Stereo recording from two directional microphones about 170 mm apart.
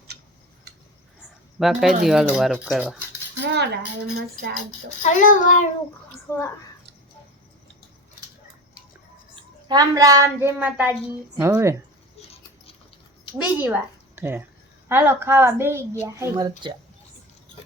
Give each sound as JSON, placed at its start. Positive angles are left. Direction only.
{"t": 1.5, "sound": "speech", "side_deg": 0}
{"t": 3.4, "sound": "cutlery", "side_deg": -85}
{"t": 5.0, "sound": "child singing", "side_deg": 50}
{"t": 6.2, "sound": "a child's voice", "side_deg": 15}
{"t": 9.3, "sound": "a woman's voice", "side_deg": -25}
{"t": 13.4, "sound": "a woman's voice", "side_deg": -10}